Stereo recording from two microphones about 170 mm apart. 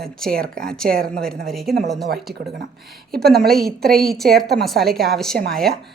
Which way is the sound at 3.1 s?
65° right (ahead or behind).